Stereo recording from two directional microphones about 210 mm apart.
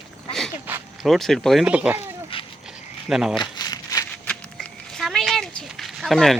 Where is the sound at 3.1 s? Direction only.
Centre (ahead or behind).